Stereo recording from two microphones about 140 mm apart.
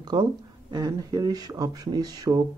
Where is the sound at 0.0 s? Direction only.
30° right (ahead or behind).